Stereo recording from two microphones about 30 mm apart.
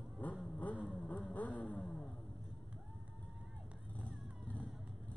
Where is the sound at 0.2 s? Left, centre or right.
Left.